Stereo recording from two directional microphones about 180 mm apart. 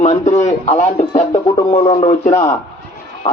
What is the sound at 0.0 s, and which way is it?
A man's voice, 40° left (ahead or behind).